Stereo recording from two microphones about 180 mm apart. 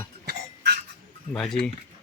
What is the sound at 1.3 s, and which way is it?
Speech, 5° left (ahead or behind).